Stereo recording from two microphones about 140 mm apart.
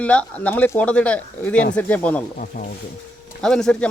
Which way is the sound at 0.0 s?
10° left (ahead or behind).